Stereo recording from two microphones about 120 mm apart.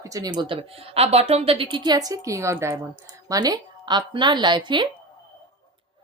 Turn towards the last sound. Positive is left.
turn(degrees=-40)  # may be behind; listen again after turning